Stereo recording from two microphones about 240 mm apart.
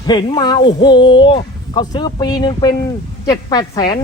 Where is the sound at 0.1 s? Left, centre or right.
Centre.